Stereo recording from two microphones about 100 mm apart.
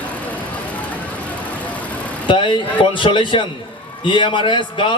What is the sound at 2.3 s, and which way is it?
Speech, 55° left (ahead or behind).